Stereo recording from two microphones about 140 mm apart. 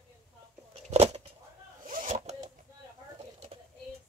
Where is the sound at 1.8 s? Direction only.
65° right (ahead or behind).